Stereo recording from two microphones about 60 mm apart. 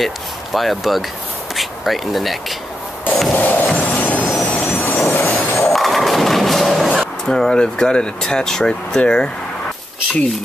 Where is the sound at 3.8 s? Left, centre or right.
Left.